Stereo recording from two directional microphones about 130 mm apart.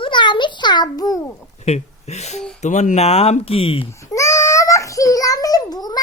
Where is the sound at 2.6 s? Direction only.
70° left (ahead or behind); by 3.9 s 45° left (ahead or behind).